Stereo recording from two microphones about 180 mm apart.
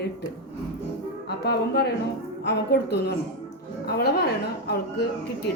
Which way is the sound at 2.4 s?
65° left (ahead or behind).